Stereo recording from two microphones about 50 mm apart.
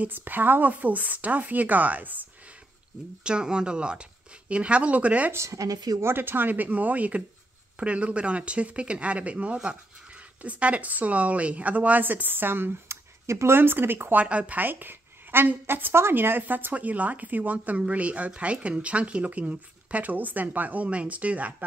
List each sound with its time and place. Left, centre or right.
0.0 s speech: right
3.3 s speech: centre
6.1 s speech: right
13.6 s speech: right
14.1 s speech: right
14.6 s speech: right